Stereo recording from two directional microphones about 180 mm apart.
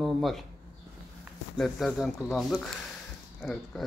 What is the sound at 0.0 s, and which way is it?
Speech, centre (ahead or behind).